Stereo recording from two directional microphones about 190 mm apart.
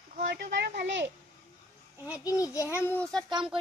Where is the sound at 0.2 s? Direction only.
70° right (ahead or behind).